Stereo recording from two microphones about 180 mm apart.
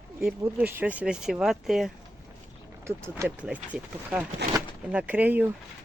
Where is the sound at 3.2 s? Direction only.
10° right (ahead or behind).